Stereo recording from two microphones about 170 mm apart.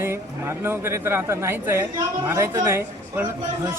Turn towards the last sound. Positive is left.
turn(degrees=-15)  # may be behind; listen again after turning